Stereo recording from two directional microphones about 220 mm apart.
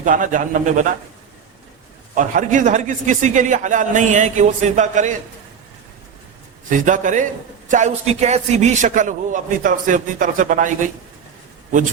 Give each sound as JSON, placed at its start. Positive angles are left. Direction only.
{"t": 0.0, "sound": "a man's voice", "side_deg": -35}
{"t": 2.1, "sound": "a man's voice", "side_deg": -35}
{"t": 6.7, "sound": "a man's voice", "side_deg": -35}